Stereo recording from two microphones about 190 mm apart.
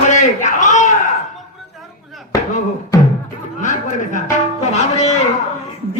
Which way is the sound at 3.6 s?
40° left (ahead or behind).